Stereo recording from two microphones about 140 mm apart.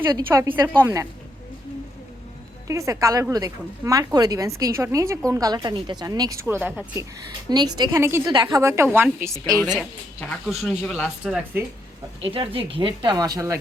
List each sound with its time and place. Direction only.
0.3 s speech: 15° right (ahead or behind)
2.6 s speech: 25° right (ahead or behind)
7.5 s speech: 30° right (ahead or behind)
7.9 s speech: 15° right (ahead or behind)
8.2 s speech: 30° right (ahead or behind)
10.5 s speech: centre (ahead or behind)
12.2 s speech: 40° right (ahead or behind); by 13.6 s 25° right (ahead or behind)